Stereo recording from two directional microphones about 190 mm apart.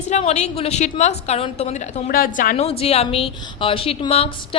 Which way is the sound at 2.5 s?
30° left (ahead or behind).